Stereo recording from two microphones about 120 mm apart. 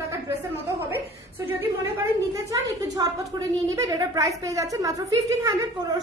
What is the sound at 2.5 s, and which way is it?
A woman's voice, 30° right (ahead or behind).